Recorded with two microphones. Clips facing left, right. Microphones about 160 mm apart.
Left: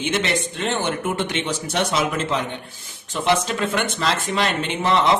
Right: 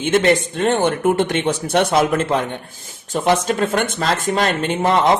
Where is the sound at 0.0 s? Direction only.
50° right (ahead or behind).